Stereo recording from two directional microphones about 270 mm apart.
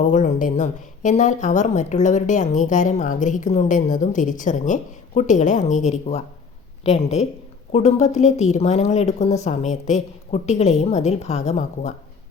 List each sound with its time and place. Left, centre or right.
0.0 s speech: left